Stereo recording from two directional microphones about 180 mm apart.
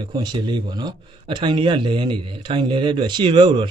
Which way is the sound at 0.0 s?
25° right (ahead or behind).